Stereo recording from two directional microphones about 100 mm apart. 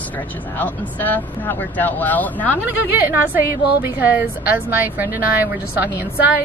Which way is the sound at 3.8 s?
20° right (ahead or behind).